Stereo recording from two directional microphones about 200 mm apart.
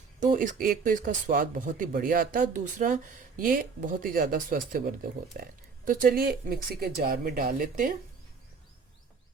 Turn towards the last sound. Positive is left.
turn(degrees=-40)  # may be behind; listen again after turning